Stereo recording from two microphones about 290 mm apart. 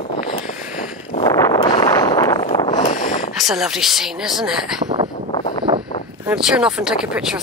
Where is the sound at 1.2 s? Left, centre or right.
Centre.